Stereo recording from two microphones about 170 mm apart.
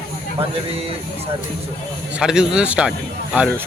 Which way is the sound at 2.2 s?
5° right (ahead or behind).